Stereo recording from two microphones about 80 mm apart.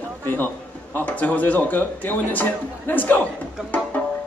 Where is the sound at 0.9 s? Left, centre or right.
Centre.